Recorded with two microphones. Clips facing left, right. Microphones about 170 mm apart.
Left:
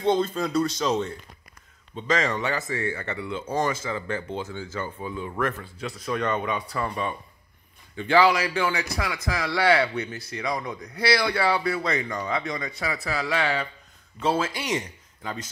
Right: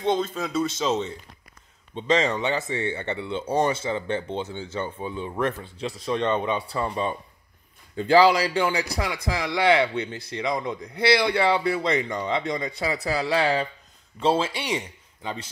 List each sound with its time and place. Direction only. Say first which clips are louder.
0.1 s speech: left 2 dB; centre (ahead or behind)
2.0 s speech: right 3 dB; 30° right (ahead or behind)